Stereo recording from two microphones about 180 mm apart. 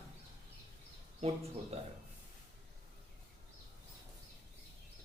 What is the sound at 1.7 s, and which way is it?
Speech, 35° right (ahead or behind).